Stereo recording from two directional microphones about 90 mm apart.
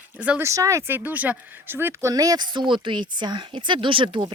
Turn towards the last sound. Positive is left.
turn(degrees=-60)  # may be behind; listen again after turning